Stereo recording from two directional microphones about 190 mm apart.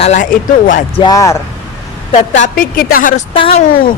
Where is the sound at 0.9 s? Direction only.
20° left (ahead or behind).